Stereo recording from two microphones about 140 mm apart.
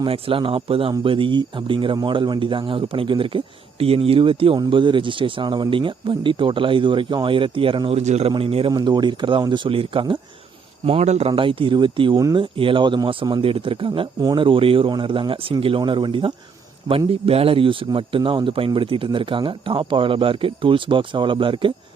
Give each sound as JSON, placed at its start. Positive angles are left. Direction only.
{"t": 0.0, "sound": "speech", "side_deg": -40}
{"t": 8.0, "sound": "speech", "side_deg": -55}
{"t": 8.3, "sound": "speech", "side_deg": -40}
{"t": 11.3, "sound": "speech", "side_deg": -35}